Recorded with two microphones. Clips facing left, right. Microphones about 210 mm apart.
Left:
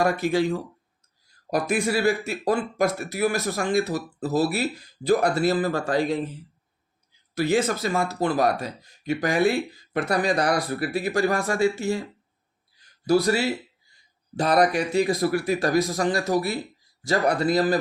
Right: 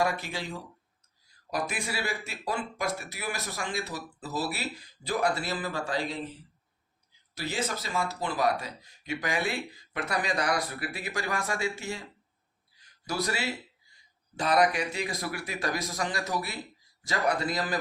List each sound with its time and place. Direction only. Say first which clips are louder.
0.0 s speech: left 9 dB; 50° left (ahead or behind)
7.3 s speech: left 11 dB; 55° left (ahead or behind); by 12.0 s 40° left (ahead or behind)
13.1 s speech: left 11 dB; 35° left (ahead or behind)